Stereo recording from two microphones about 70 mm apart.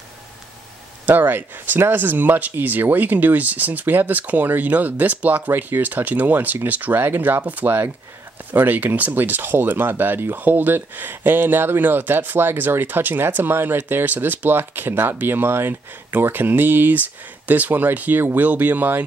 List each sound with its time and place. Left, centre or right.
1.0 s speech: right